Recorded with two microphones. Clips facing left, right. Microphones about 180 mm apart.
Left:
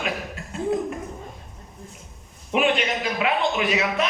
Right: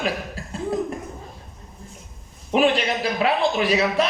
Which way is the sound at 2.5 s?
35° right (ahead or behind).